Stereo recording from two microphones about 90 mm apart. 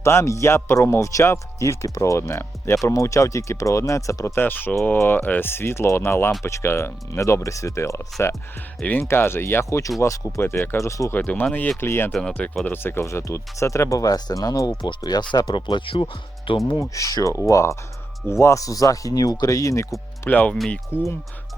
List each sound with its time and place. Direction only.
0.0 s speech: 30° left (ahead or behind)
4.4 s speech: 20° left (ahead or behind)
8.8 s speech: 20° left (ahead or behind); by 11.1 s 35° left (ahead or behind)
11.1 s speech: 20° left (ahead or behind); by 14.7 s 40° left (ahead or behind)
14.8 s speech: 55° left (ahead or behind)
16.9 s speech: 40° left (ahead or behind)
20.3 s speech: 15° left (ahead or behind)